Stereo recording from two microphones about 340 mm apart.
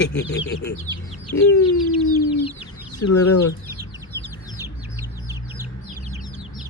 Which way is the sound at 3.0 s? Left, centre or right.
Left.